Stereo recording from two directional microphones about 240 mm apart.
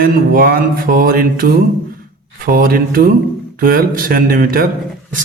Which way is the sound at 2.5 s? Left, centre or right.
Right.